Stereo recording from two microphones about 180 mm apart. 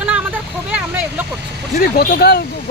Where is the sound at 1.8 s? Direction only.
55° left (ahead or behind).